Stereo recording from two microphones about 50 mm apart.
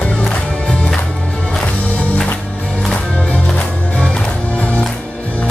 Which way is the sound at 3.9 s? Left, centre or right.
Left.